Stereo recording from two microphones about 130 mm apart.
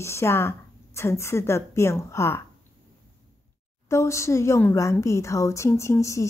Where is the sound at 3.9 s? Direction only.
20° left (ahead or behind).